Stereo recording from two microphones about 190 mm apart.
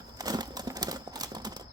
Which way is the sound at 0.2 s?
20° right (ahead or behind).